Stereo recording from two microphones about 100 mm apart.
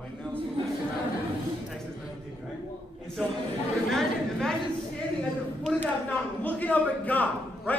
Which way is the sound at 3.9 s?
5° left (ahead or behind).